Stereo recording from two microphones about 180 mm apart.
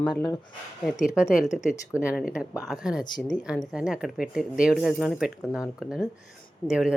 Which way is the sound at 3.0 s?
25° left (ahead or behind).